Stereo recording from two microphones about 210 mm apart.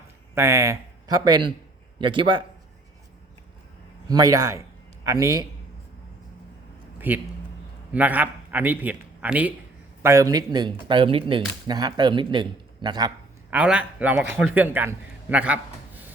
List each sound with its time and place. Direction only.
0.3 s a man's voice: 15° right (ahead or behind)
4.1 s speech: 15° right (ahead or behind)
7.1 s a man's voice: 10° right (ahead or behind)
13.5 s a man's voice: 5° right (ahead or behind)